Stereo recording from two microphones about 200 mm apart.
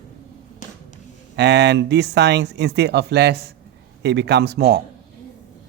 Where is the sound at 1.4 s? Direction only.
60° right (ahead or behind).